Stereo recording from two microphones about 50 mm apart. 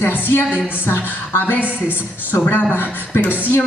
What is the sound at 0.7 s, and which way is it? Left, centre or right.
Speech, left.